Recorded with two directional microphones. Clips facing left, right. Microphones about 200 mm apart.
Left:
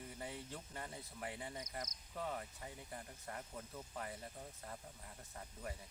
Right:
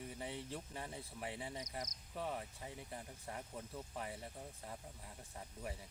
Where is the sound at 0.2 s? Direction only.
25° right (ahead or behind).